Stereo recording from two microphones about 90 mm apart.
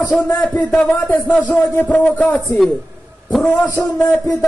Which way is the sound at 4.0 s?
35° left (ahead or behind).